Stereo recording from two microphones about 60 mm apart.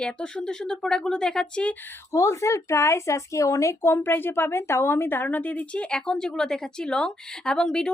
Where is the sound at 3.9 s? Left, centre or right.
Left.